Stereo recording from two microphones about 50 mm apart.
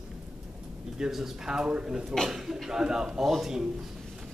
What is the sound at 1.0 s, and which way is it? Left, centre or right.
A man's voice, centre.